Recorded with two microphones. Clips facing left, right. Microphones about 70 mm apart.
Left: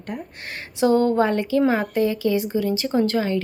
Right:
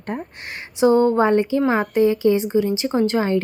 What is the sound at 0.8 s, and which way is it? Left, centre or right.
A woman's voice, centre.